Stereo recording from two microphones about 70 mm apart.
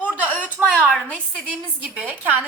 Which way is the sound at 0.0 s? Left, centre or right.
Left.